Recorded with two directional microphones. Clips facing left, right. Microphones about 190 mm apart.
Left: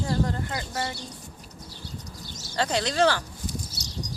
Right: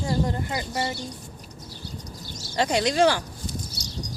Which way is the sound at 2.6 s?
15° right (ahead or behind).